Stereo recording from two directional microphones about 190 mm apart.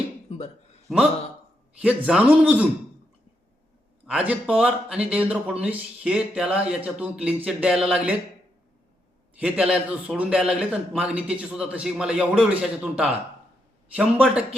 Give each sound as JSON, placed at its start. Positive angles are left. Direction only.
{"t": 0.3, "sound": "a sound", "side_deg": 35}
{"t": 1.8, "sound": "speech", "side_deg": -5}
{"t": 4.0, "sound": "speech", "side_deg": -5}
{"t": 9.4, "sound": "a man's voice", "side_deg": -5}